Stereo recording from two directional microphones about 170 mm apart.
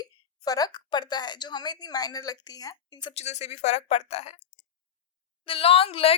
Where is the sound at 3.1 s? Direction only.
40° left (ahead or behind).